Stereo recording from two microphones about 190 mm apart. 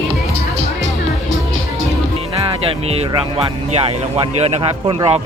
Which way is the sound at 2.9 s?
35° right (ahead or behind).